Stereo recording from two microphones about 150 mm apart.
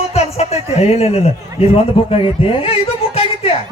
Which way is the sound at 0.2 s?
45° left (ahead or behind).